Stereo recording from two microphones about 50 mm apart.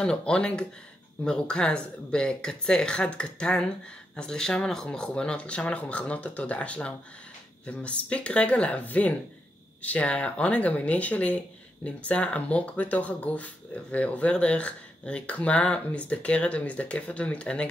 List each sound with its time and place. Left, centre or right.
0.0 s speech: centre